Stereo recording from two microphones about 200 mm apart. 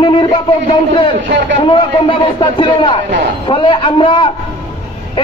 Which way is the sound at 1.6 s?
25° left (ahead or behind).